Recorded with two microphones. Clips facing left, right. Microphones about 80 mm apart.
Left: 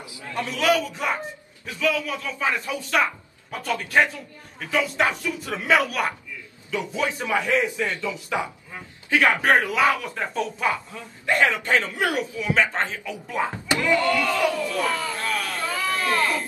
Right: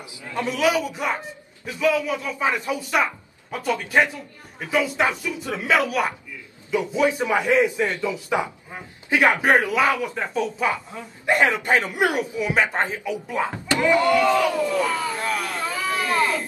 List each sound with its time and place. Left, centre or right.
0.3 s a man's voice: centre
0.6 s a man's voice: centre
6.7 s a man's voice: centre
9.5 s speech: centre
10.9 s a man's voice: right
14.9 s speech: centre
15.7 s a sound: centre